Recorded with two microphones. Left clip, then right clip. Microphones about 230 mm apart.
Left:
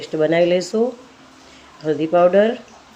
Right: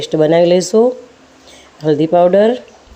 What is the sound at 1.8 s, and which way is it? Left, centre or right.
Speech, right.